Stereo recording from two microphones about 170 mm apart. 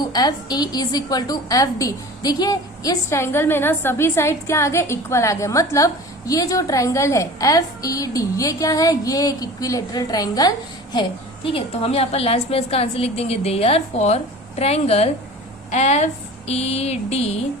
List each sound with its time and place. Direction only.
0.1 s a woman's voice: 25° left (ahead or behind)
11.4 s a woman's voice: 35° left (ahead or behind)